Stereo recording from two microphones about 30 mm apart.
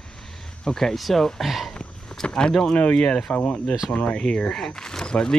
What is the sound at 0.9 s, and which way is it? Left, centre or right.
Speech, centre.